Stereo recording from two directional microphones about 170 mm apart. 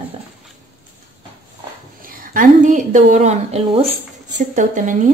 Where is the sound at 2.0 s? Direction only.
55° right (ahead or behind); by 3.9 s 35° right (ahead or behind).